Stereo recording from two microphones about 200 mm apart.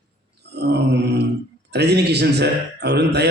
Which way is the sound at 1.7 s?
55° right (ahead or behind).